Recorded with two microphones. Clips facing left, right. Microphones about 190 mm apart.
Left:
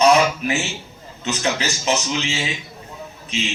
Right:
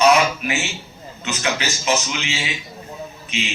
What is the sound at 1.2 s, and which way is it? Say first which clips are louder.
A man's voice: left 1 dB; 35° left (ahead or behind).